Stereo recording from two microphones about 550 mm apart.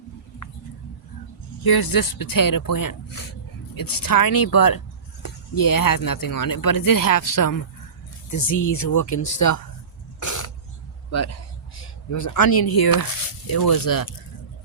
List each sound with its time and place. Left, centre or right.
1.6 s speech: left
10.2 s a sound: left
11.8 s speech: left